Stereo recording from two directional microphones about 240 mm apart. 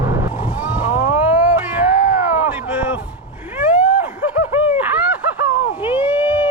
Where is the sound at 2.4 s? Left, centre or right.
Centre.